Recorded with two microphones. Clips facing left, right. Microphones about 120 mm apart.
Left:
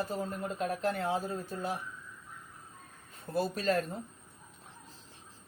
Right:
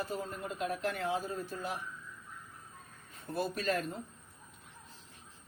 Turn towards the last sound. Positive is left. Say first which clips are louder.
# left 3 dB
turn(degrees=35)  # may be behind; listen again after turning